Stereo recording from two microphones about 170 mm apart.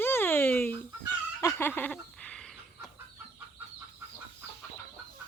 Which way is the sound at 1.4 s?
15° left (ahead or behind).